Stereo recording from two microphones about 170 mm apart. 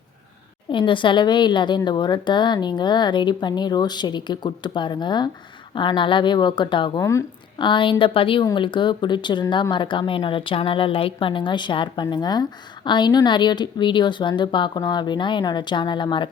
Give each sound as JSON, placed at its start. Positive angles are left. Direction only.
{"t": 0.7, "sound": "speech", "side_deg": 30}
{"t": 7.0, "sound": "a woman's voice", "side_deg": 15}
{"t": 7.6, "sound": "speech", "side_deg": 30}